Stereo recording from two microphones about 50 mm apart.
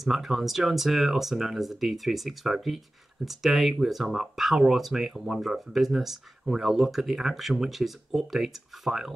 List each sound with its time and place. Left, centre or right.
0.0 s speech: centre